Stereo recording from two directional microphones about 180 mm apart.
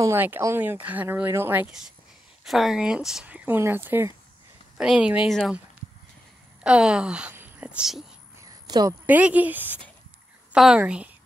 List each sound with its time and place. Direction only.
0.0 s speech: 10° right (ahead or behind)
6.6 s a woman's voice: 5° right (ahead or behind)
8.6 s a woman's voice: 20° right (ahead or behind)
9.0 s speech: 10° right (ahead or behind)